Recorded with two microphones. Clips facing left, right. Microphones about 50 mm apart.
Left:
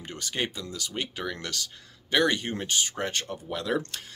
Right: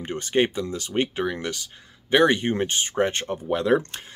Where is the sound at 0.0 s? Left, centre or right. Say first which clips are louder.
Right 9 dB; right.